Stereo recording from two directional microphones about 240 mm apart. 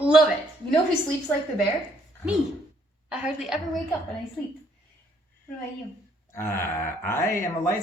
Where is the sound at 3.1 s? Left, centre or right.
Centre.